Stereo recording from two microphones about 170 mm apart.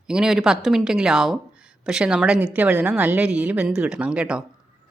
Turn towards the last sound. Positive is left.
turn(degrees=-5)  # may be behind; listen again after turning